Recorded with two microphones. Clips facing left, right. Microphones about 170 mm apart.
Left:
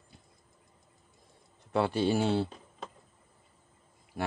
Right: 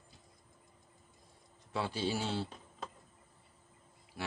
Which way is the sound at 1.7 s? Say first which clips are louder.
Left 8 dB; 60° left (ahead or behind).